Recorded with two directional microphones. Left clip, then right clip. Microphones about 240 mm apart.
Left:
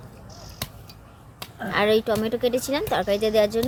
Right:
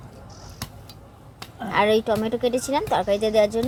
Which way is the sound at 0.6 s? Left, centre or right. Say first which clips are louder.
Left 3 dB; left.